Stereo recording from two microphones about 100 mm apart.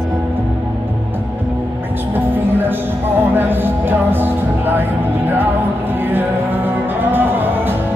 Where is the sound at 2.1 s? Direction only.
20° right (ahead or behind).